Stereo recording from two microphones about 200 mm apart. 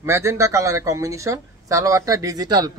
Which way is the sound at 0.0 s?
15° right (ahead or behind).